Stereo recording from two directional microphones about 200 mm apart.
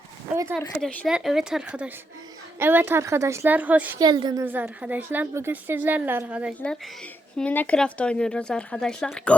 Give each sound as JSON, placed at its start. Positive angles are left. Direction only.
{"t": 0.8, "sound": "a woman's voice", "side_deg": 5}
{"t": 4.0, "sound": "a woman's voice", "side_deg": -20}
{"t": 4.4, "sound": "a woman's voice", "side_deg": -10}
{"t": 6.6, "sound": "speech", "side_deg": 5}